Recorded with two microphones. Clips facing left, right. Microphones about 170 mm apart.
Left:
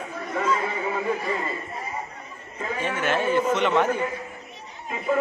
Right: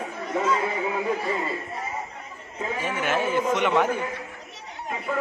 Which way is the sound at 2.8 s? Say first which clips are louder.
Left 2 dB; 10° right (ahead or behind).